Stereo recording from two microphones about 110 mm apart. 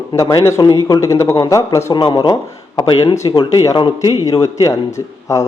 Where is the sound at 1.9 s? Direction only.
45° left (ahead or behind).